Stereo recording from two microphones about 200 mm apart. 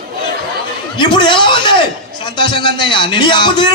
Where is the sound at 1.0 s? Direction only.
25° left (ahead or behind).